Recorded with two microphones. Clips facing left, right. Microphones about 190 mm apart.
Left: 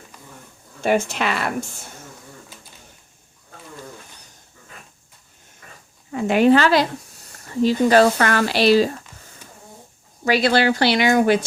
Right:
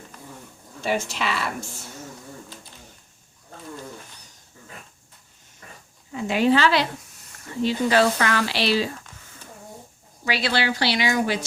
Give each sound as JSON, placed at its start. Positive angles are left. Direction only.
{"t": 0.8, "sound": "speech", "side_deg": 50}
{"t": 6.1, "sound": "speech", "side_deg": 55}
{"t": 10.2, "sound": "speech", "side_deg": 45}